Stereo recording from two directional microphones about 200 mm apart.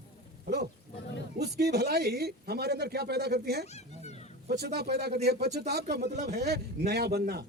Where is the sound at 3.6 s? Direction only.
35° left (ahead or behind).